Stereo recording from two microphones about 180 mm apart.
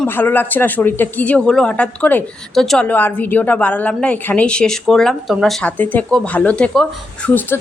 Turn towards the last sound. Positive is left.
turn(degrees=10)  # may be behind; listen again after turning